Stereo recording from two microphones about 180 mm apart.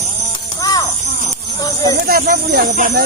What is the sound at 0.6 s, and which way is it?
Children playing, 20° left (ahead or behind).